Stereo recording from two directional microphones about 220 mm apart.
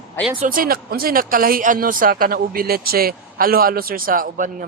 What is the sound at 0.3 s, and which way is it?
Speech, 40° right (ahead or behind).